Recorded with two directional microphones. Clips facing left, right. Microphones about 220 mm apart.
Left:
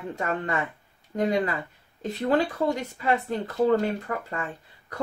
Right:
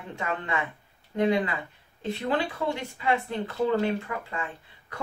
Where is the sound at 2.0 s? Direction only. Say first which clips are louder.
Left 4 dB; 40° left (ahead or behind).